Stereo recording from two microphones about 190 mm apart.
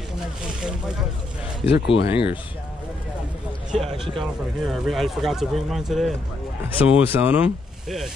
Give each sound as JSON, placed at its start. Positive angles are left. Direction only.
{"t": 0.4, "sound": "speech", "side_deg": -5}
{"t": 1.7, "sound": "speech", "side_deg": 65}
{"t": 3.9, "sound": "speech", "side_deg": 0}